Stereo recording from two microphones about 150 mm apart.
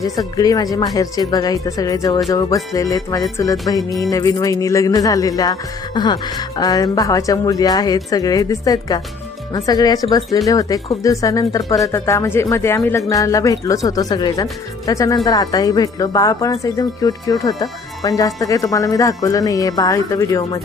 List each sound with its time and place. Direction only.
0.0 s speech: 25° left (ahead or behind)